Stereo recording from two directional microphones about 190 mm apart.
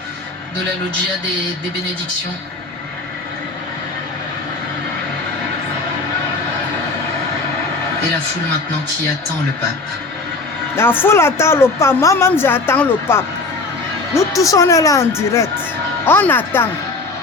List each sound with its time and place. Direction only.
10.8 s speech: 10° left (ahead or behind)